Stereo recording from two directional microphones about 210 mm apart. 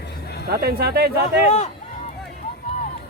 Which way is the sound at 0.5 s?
50° right (ahead or behind).